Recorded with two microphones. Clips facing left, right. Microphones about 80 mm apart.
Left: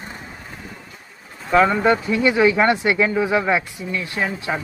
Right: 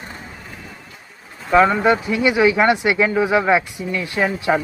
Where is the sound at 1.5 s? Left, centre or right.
Centre.